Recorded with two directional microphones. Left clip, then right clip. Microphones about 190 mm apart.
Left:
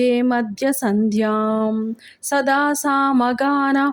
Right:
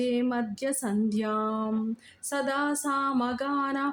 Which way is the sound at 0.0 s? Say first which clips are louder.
Left 10 dB; 45° left (ahead or behind).